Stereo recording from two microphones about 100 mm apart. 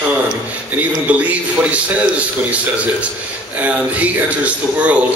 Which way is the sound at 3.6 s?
15° right (ahead or behind).